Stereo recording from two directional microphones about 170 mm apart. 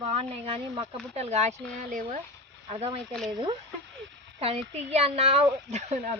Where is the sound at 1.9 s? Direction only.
50° right (ahead or behind).